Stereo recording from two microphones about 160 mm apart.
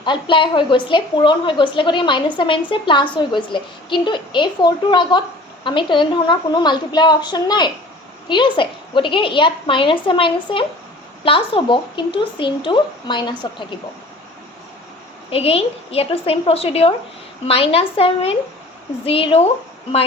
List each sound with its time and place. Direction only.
0.0 s a woman's voice: 30° left (ahead or behind)
15.3 s a woman's voice: 35° left (ahead or behind)